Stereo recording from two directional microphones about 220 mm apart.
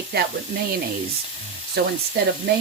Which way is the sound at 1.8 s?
45° right (ahead or behind).